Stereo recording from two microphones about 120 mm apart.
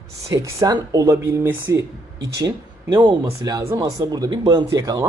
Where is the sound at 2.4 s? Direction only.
40° right (ahead or behind).